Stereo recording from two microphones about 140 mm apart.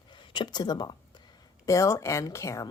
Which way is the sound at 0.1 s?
35° left (ahead or behind).